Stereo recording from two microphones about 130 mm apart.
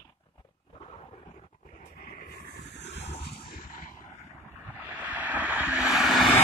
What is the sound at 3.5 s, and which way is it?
Artillery fire, 90° left.